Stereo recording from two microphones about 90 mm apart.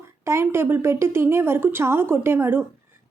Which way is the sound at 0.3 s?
30° right (ahead or behind).